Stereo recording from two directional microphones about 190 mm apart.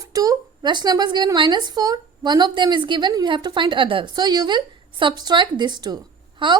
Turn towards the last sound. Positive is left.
turn(degrees=-25)  # may be behind; listen again after turning